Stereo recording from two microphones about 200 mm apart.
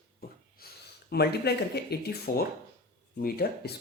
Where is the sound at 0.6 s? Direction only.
50° left (ahead or behind).